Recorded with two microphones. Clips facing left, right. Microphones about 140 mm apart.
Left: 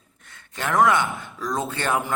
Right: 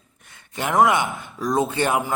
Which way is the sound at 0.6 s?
15° right (ahead or behind).